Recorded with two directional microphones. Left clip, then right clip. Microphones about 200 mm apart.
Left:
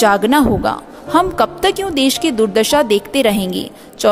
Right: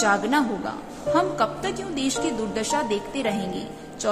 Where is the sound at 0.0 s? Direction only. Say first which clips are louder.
Left 9 dB; 55° left (ahead or behind).